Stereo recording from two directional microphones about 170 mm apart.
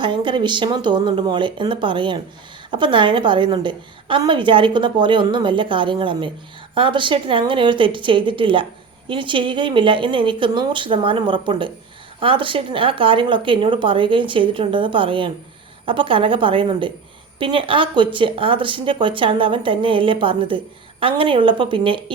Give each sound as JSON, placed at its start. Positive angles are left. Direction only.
{"t": 0.0, "sound": "a woman's voice", "side_deg": -25}